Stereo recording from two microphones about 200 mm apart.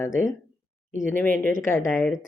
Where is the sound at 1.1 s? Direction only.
10° left (ahead or behind).